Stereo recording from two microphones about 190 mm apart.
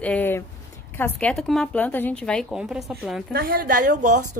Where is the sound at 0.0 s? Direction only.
10° left (ahead or behind).